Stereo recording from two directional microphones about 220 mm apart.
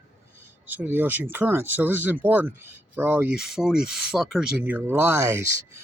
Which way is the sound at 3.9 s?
Centre (ahead or behind).